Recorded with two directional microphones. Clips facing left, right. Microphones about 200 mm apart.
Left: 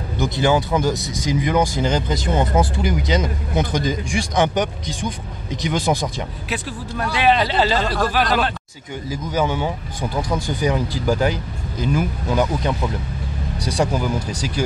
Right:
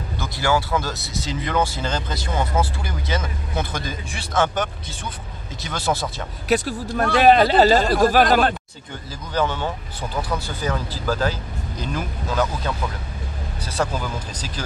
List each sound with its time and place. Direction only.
0.2 s speech: 20° left (ahead or behind)
6.5 s speech: 45° right (ahead or behind)
9.1 s speech: 10° left (ahead or behind)